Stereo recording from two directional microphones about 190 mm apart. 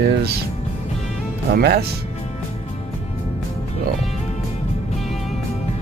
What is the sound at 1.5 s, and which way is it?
Speech, 55° right (ahead or behind).